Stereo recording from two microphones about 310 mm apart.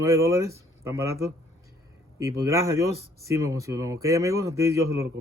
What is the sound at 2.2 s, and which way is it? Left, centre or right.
Speech, centre.